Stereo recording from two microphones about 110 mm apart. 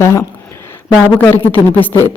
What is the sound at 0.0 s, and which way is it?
A man's voice, 25° left (ahead or behind).